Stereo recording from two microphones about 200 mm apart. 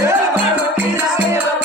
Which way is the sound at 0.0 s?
10° right (ahead or behind).